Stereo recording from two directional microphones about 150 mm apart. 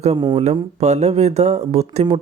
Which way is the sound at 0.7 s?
45° right (ahead or behind).